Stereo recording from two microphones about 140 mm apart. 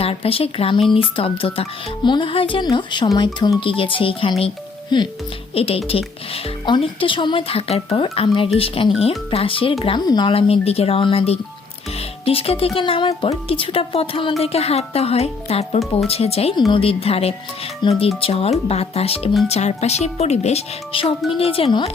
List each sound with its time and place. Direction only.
0.0 s a woman's voice: 45° left (ahead or behind)